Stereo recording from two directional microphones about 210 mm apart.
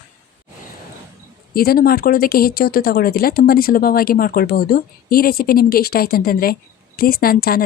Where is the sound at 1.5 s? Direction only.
45° left (ahead or behind).